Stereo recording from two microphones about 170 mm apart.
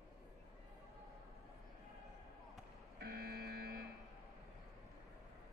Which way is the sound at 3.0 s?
65° right (ahead or behind).